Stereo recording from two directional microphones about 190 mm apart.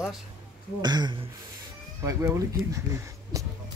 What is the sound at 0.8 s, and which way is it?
Speech, 20° right (ahead or behind).